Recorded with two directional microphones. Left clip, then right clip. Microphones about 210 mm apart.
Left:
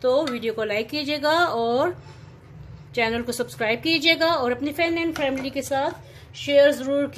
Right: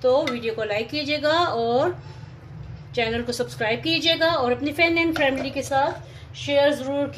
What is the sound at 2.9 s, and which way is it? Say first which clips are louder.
A woman's voice: even; 25° left (ahead or behind).